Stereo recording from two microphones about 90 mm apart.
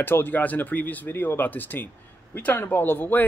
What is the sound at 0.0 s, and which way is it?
Speech, 25° left (ahead or behind).